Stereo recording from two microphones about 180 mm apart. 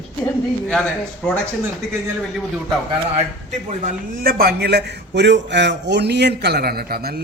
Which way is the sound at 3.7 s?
50° right (ahead or behind).